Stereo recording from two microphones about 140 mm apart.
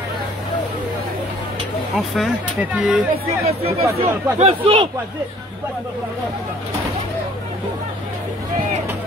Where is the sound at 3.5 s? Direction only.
45° right (ahead or behind).